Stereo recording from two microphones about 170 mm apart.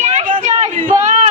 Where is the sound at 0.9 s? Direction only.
45° right (ahead or behind).